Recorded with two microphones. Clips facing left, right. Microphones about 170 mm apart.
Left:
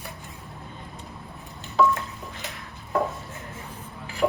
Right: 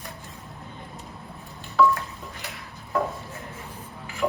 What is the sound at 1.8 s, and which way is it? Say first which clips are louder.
Dishes: right 1 dB; 20° left (ahead or behind).